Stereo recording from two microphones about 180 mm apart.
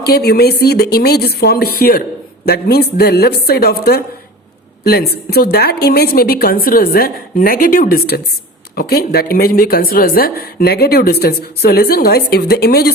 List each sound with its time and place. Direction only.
0.0 s a woman's voice: 60° left (ahead or behind)